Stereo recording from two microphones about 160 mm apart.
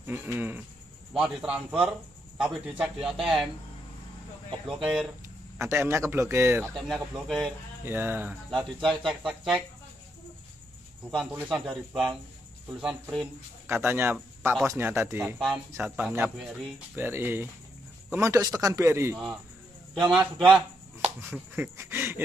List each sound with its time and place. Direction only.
0.0 s a man's voice: 10° right (ahead or behind)
4.7 s a man's voice: 5° right (ahead or behind)
6.7 s a man's voice: centre (ahead or behind)
7.8 s speech: 15° right (ahead or behind)
8.5 s a man's voice: centre (ahead or behind)
11.3 s a man's voice: 5° right (ahead or behind)
13.7 s a man's voice: 15° right (ahead or behind)
16.9 s speech: 15° right (ahead or behind)
20.1 s a man's voice: 5° right (ahead or behind)
21.2 s speech: 15° right (ahead or behind)